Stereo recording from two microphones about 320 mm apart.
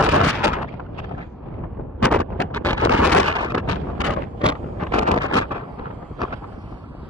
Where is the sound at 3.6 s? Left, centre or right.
Left.